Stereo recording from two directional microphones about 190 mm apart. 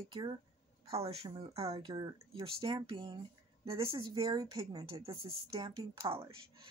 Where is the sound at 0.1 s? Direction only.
25° right (ahead or behind).